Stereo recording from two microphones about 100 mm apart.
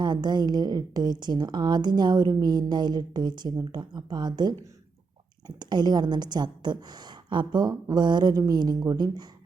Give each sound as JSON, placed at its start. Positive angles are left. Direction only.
{"t": 0.0, "sound": "a woman's voice", "side_deg": -45}
{"t": 5.5, "sound": "a woman's voice", "side_deg": -45}